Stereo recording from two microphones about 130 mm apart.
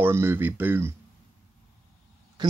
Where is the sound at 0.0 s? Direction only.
20° right (ahead or behind).